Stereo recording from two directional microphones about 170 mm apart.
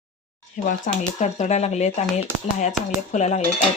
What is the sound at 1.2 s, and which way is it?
Speech, 45° left (ahead or behind).